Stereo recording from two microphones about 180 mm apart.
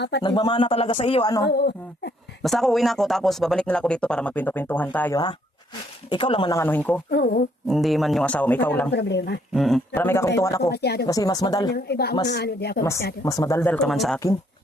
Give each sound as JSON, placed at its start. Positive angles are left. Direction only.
{"t": 0.2, "sound": "speech", "side_deg": 25}
{"t": 1.5, "sound": "speech", "side_deg": 70}
{"t": 2.4, "sound": "speech", "side_deg": 0}
{"t": 6.1, "sound": "speech", "side_deg": 25}
{"t": 6.6, "sound": "speech", "side_deg": 10}
{"t": 7.1, "sound": "speech", "side_deg": 60}
{"t": 7.7, "sound": "speech", "side_deg": 0}
{"t": 8.9, "sound": "speech", "side_deg": 70}
{"t": 9.6, "sound": "speech", "side_deg": 0}
{"t": 10.7, "sound": "speech", "side_deg": 65}
{"t": 11.0, "sound": "speech", "side_deg": 20}
{"t": 11.7, "sound": "speech", "side_deg": 65}
{"t": 13.2, "sound": "speech", "side_deg": 20}